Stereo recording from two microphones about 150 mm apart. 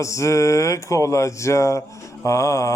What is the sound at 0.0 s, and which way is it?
Speech, 20° left (ahead or behind).